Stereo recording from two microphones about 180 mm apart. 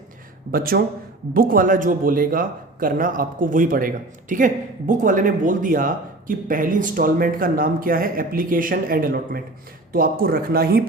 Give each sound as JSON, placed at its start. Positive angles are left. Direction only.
{"t": 0.5, "sound": "a man's voice", "side_deg": -55}